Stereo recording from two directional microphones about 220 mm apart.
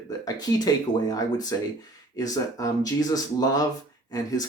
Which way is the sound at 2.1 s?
15° left (ahead or behind).